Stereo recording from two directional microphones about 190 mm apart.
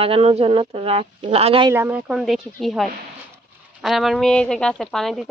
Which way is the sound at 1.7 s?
10° right (ahead or behind).